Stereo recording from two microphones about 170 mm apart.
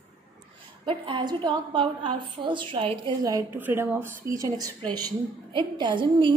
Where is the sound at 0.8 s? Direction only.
30° right (ahead or behind).